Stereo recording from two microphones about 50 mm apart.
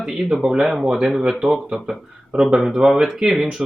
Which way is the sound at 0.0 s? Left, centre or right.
Centre.